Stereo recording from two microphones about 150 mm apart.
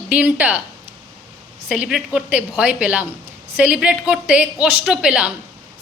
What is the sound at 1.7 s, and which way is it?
A woman's voice, 5° right (ahead or behind).